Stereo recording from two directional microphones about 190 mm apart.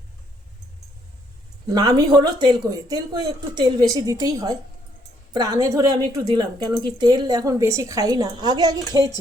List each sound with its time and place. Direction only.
1.7 s speech: 20° right (ahead or behind)